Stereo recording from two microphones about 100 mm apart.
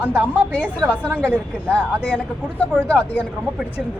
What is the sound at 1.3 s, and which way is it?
Speech, 15° left (ahead or behind).